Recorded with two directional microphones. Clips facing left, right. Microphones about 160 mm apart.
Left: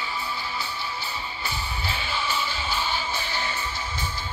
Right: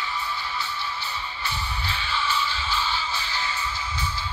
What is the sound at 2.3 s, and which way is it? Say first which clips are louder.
Music: right 1 dB; 50° left (ahead or behind).